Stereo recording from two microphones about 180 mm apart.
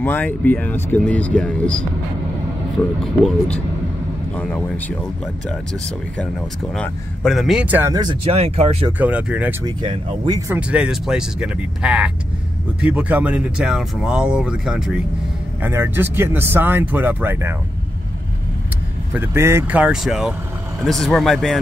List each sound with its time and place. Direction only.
0.0 s speech: 10° left (ahead or behind)
6.7 s speech: centre (ahead or behind)
7.9 s speech: 25° right (ahead or behind)
8.9 s speech: 10° right (ahead or behind)
9.7 s speech: 25° right (ahead or behind)
10.5 s speech: 5° right (ahead or behind)
19.1 s speech: 15° right (ahead or behind); by 21.5 s centre (ahead or behind)